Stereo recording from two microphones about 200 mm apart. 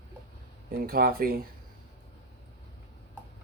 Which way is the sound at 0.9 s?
50° right (ahead or behind).